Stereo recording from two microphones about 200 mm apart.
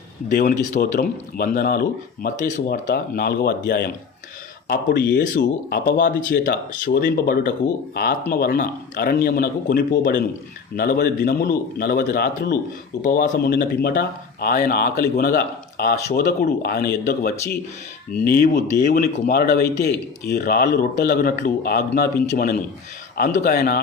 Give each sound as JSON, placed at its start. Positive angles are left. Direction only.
{"t": 0.3, "sound": "speech", "side_deg": 45}